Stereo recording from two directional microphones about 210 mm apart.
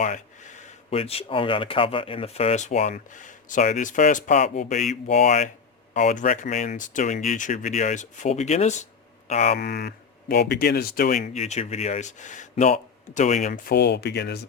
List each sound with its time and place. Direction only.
0.0 s speech: 35° left (ahead or behind)
11.3 s speech: 30° left (ahead or behind); by 14.4 s 50° left (ahead or behind)